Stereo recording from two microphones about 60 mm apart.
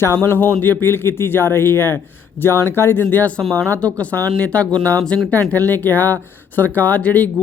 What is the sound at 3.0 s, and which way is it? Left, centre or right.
Speech, left.